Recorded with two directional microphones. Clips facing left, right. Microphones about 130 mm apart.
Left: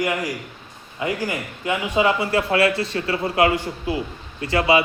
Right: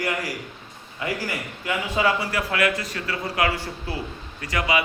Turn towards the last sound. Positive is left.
turn(degrees=30)  # may be behind; listen again after turning